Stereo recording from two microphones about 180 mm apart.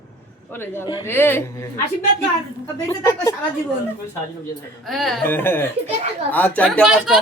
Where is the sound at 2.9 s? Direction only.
15° left (ahead or behind).